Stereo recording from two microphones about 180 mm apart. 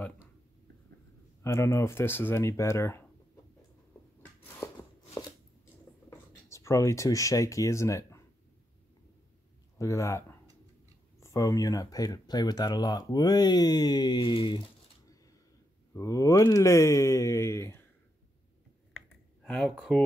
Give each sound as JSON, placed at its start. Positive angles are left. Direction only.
{"t": 1.4, "sound": "speech", "side_deg": 15}
{"t": 4.6, "sound": "chopping", "side_deg": 15}
{"t": 6.0, "sound": "speech", "side_deg": 15}
{"t": 9.8, "sound": "speech", "side_deg": 15}
{"t": 15.9, "sound": "speech", "side_deg": 20}
{"t": 18.9, "sound": "computer keyboard", "side_deg": 5}